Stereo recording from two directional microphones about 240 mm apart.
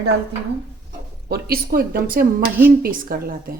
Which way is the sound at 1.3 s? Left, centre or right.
Right.